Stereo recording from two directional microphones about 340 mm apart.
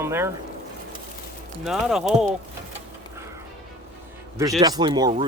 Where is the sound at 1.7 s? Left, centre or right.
Centre.